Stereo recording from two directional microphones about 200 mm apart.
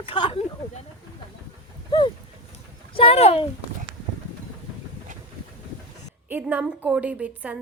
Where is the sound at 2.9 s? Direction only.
30° left (ahead or behind).